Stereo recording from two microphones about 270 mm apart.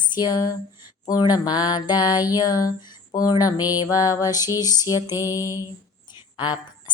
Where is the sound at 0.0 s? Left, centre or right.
Centre.